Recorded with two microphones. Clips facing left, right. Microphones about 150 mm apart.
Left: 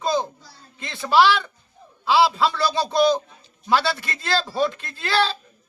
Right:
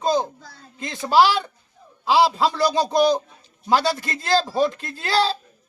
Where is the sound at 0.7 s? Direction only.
40° right (ahead or behind).